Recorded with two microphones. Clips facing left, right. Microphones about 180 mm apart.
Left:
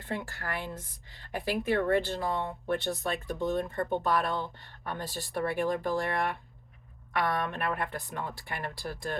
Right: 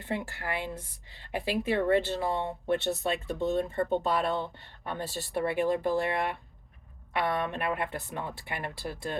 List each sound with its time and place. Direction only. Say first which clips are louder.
0.0 s speech: right 2 dB; 20° right (ahead or behind)